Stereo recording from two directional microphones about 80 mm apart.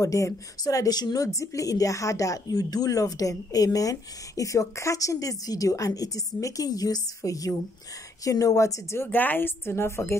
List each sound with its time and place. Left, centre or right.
0.0 s a woman's voice: left
9.0 s a woman's voice: left